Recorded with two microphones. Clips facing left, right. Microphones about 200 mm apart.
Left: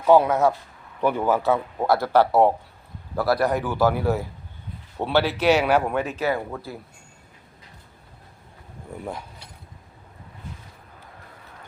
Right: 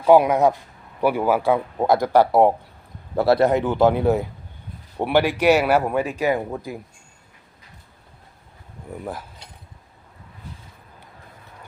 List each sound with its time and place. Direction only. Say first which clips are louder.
0.1 s speech: right 2 dB; 15° right (ahead or behind)
3.2 s speech: right 5 dB; 25° right (ahead or behind)